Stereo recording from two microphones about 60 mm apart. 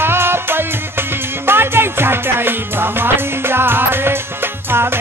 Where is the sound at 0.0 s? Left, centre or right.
Right.